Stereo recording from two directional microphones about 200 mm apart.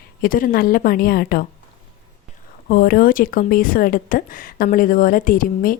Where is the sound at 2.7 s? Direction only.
50° left (ahead or behind).